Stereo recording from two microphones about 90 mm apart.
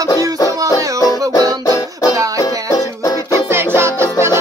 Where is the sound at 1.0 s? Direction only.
40° left (ahead or behind).